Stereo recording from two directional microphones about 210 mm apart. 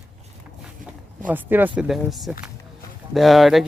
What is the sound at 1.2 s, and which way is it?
Speech, 10° right (ahead or behind).